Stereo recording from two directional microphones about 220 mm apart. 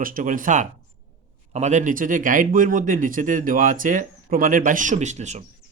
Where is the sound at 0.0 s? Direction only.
40° right (ahead or behind).